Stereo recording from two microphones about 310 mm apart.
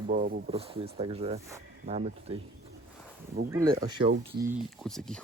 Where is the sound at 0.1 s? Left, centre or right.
Right.